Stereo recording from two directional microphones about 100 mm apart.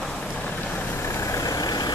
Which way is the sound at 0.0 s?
5° left (ahead or behind).